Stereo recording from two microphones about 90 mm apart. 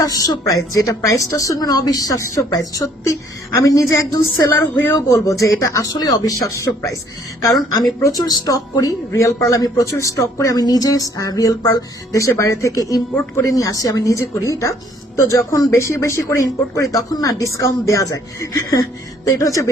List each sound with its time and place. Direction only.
0.0 s a woman's voice: 40° left (ahead or behind)
8.0 s a woman's voice: 45° left (ahead or behind)